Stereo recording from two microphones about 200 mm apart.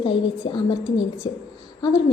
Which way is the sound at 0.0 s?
25° left (ahead or behind).